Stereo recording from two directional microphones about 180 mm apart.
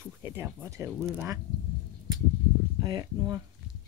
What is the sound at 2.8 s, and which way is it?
Speech, 20° right (ahead or behind).